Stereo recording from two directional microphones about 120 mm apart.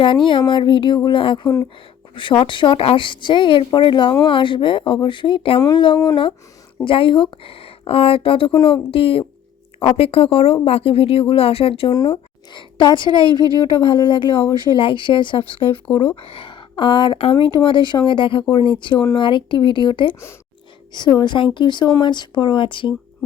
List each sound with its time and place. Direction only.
0.3 s a woman's voice: 45° left (ahead or behind)